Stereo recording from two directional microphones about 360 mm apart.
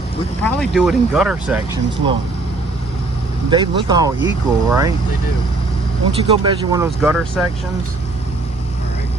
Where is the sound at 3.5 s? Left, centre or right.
Centre.